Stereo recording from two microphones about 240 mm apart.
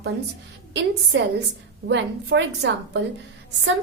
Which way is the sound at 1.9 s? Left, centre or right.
Right.